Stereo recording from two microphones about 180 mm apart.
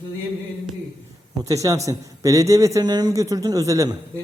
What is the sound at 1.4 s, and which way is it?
A man's voice, 20° right (ahead or behind).